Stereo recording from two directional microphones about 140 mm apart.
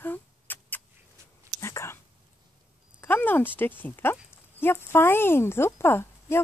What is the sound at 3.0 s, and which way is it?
Speech, 15° left (ahead or behind).